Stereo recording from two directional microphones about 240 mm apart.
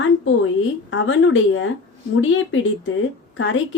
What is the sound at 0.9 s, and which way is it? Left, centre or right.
A woman's voice, left.